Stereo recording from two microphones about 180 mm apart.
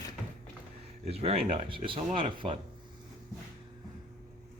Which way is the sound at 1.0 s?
35° right (ahead or behind).